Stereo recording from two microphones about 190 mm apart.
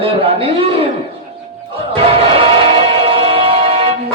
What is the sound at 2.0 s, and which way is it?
Music, 30° right (ahead or behind).